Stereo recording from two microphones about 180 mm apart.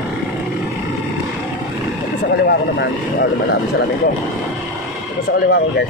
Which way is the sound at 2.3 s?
65° left (ahead or behind).